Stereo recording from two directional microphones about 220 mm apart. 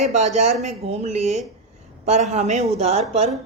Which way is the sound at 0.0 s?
30° right (ahead or behind).